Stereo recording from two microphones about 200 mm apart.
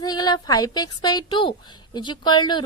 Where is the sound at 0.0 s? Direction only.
20° left (ahead or behind).